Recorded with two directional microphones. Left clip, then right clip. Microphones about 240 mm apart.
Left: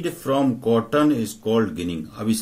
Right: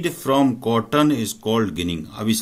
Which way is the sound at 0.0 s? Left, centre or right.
Right.